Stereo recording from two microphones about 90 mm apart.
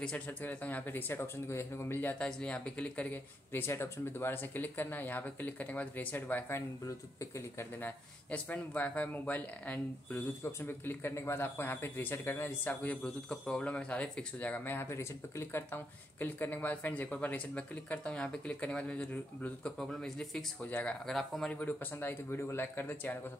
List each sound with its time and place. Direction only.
0.0 s speech: 15° left (ahead or behind)
7.2 s speech: 30° left (ahead or behind)
7.8 s speech: 20° left (ahead or behind)
20.6 s speech: 15° left (ahead or behind)
21.1 s speech: 5° left (ahead or behind)
21.5 s speech: 20° left (ahead or behind)